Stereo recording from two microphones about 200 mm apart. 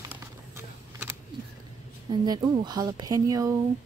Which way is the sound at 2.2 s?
20° right (ahead or behind).